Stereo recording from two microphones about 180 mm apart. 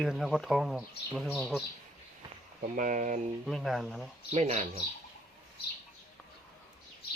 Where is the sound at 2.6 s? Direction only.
45° right (ahead or behind).